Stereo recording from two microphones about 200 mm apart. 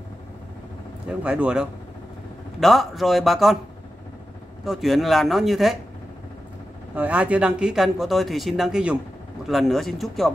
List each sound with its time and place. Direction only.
1.2 s speech: 5° right (ahead or behind)
4.6 s speech: centre (ahead or behind)
7.0 s speech: 5° right (ahead or behind)